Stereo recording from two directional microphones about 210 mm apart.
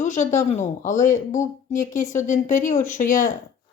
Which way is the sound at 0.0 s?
35° left (ahead or behind).